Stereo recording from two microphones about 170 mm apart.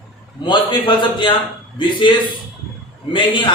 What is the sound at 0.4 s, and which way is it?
A man's voice, 30° left (ahead or behind).